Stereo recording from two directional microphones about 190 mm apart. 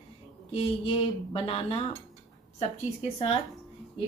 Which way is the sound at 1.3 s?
30° left (ahead or behind).